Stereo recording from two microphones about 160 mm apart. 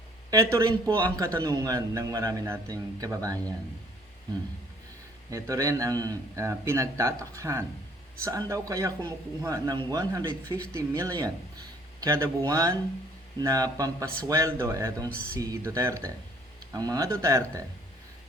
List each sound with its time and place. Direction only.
0.3 s a man's voice: 20° right (ahead or behind)
5.3 s a man's voice: 20° right (ahead or behind)